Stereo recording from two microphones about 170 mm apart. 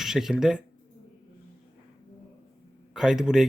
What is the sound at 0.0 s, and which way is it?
Speech, centre (ahead or behind).